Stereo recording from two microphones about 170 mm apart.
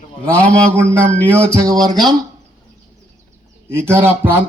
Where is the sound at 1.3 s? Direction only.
15° right (ahead or behind).